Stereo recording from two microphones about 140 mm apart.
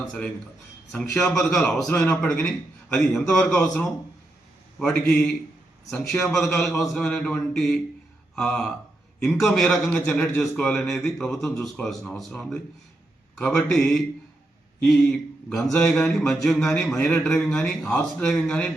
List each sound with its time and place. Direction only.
0.9 s a man's voice: 5° left (ahead or behind)